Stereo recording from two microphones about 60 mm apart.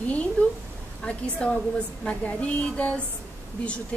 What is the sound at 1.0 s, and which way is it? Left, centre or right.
A woman's voice, centre.